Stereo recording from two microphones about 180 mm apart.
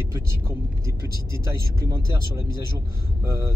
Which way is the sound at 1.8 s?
15° right (ahead or behind).